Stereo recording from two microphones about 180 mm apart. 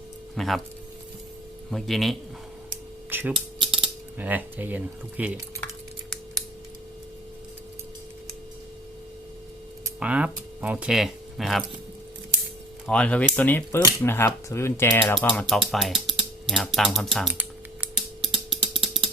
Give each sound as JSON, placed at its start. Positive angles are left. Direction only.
{"t": 0.3, "sound": "music", "side_deg": 0}
{"t": 1.7, "sound": "speech", "side_deg": 0}
{"t": 3.1, "sound": "speech", "side_deg": -10}
{"t": 3.6, "sound": "coin", "side_deg": -30}
{"t": 4.2, "sound": "speech", "side_deg": -10}
{"t": 10.0, "sound": "speech", "side_deg": -5}
{"t": 12.9, "sound": "speech", "side_deg": 5}
{"t": 15.3, "sound": "speech", "side_deg": 0}
{"t": 17.3, "sound": "typing", "side_deg": -10}